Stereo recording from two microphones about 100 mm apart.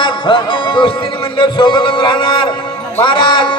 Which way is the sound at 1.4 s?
55° left (ahead or behind).